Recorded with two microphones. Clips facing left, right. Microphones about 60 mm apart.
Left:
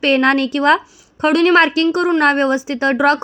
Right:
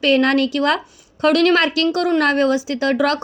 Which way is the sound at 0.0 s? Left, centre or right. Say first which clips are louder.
Left 1 dB; left.